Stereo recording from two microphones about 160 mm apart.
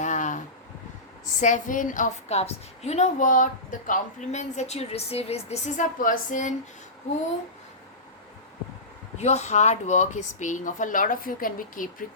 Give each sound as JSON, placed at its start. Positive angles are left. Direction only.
{"t": 0.0, "sound": "a sound", "side_deg": 50}
{"t": 1.4, "sound": "a woman's voice", "side_deg": 50}
{"t": 9.1, "sound": "a woman's voice", "side_deg": 45}